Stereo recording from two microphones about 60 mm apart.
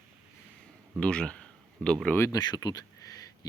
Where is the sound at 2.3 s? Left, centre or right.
Left.